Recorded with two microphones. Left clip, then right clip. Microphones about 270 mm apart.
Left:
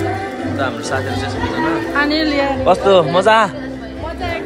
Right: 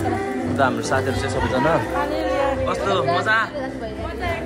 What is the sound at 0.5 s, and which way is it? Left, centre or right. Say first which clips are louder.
Speech: right 1 dB; centre.